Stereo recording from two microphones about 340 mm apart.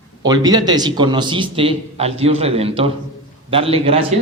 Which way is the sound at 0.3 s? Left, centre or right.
Centre.